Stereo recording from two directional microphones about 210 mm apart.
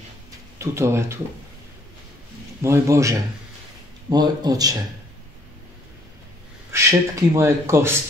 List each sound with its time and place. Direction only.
0.6 s speech: 15° right (ahead or behind)
2.6 s speech: 15° right (ahead or behind)
6.7 s speech: 15° right (ahead or behind)